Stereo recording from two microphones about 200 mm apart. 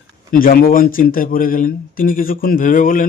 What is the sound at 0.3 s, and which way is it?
A man's voice, 45° left (ahead or behind).